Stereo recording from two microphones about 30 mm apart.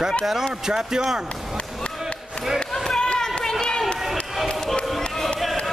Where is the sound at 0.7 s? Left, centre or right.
Centre.